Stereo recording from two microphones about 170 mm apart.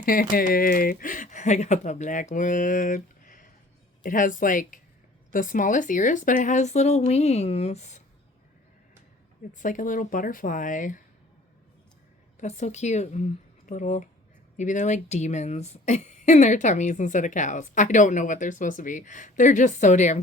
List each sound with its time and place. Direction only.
0.0 s speech: 55° left (ahead or behind)
9.6 s speech: 50° left (ahead or behind)
12.4 s speech: 45° left (ahead or behind)